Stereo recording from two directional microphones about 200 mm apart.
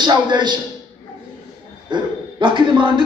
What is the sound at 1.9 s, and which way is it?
Speech, 25° right (ahead or behind).